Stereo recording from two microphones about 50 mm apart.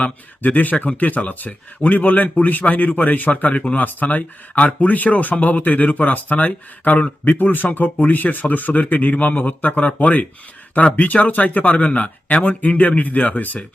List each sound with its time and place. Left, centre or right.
0.0 s speech: left